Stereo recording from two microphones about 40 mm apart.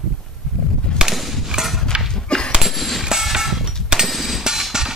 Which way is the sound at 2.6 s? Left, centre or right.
Centre.